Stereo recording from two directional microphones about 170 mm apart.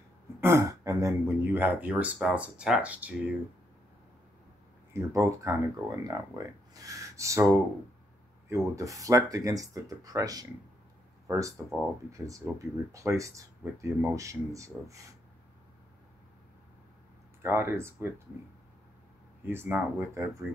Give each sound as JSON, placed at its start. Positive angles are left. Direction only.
{"t": 0.4, "sound": "speech", "side_deg": -15}
{"t": 4.9, "sound": "speech", "side_deg": -15}
{"t": 17.4, "sound": "speech", "side_deg": -15}
{"t": 19.4, "sound": "speech", "side_deg": -10}